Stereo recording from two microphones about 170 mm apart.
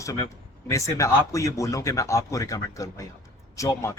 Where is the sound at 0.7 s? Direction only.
20° left (ahead or behind).